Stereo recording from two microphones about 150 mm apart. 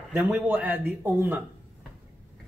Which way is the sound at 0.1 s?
10° right (ahead or behind).